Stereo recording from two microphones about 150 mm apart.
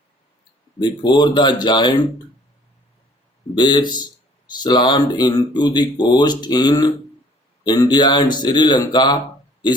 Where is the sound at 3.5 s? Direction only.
30° left (ahead or behind).